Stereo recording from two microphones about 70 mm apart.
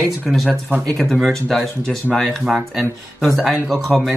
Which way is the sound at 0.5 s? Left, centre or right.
Right.